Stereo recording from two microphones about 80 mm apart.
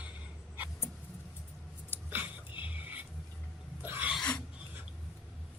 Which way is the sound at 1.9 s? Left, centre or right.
Left.